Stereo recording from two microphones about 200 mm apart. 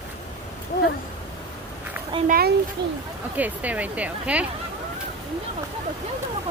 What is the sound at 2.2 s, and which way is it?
Speech, 45° right (ahead or behind).